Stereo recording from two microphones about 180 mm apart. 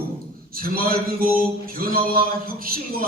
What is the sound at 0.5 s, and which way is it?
A man's voice, 55° right (ahead or behind).